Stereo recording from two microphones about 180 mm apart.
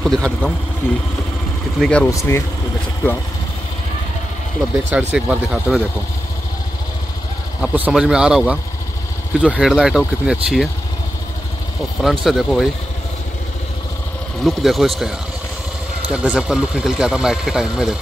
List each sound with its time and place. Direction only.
0.0 s speech: centre (ahead or behind)
1.8 s speech: 5° left (ahead or behind)
4.9 s speech: 5° right (ahead or behind)
7.6 s speech: 5° right (ahead or behind)
12.0 s speech: centre (ahead or behind)
14.4 s speech: centre (ahead or behind)